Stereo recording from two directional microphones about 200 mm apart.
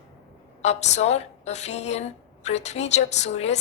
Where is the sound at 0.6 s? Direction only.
35° left (ahead or behind).